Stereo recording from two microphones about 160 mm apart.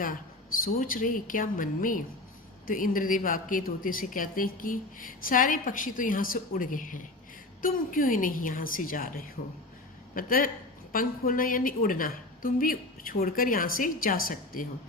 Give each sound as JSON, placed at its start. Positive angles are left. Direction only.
{"t": 0.0, "sound": "a woman's voice", "side_deg": 60}